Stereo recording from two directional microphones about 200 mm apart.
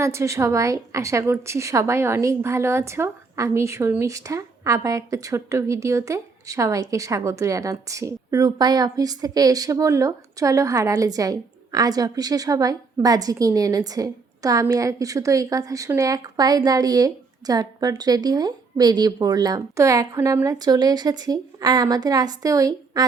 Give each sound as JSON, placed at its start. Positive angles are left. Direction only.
{"t": 0.0, "sound": "a woman's voice", "side_deg": -15}